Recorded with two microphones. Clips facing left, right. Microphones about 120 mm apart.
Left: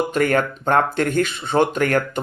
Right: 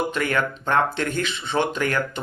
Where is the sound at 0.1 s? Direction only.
45° left (ahead or behind).